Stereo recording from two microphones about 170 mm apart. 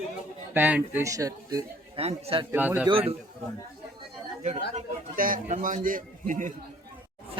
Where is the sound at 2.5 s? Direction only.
10° right (ahead or behind).